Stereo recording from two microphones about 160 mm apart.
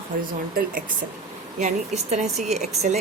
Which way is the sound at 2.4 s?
45° right (ahead or behind).